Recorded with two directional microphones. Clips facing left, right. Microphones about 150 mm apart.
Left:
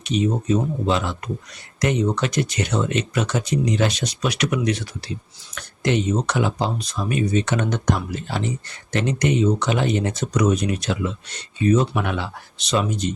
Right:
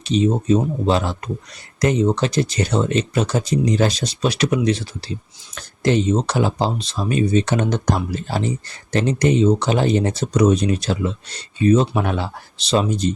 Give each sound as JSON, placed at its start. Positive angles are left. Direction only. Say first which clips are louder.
{"t": 0.0, "sound": "speech", "louder": "right 3 dB", "side_deg": -30}